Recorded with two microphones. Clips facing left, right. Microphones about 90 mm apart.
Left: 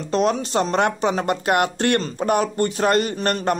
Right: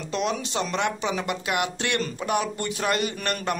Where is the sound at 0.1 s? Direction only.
40° left (ahead or behind).